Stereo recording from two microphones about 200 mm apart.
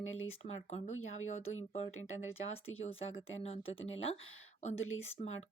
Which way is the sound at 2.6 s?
85° left.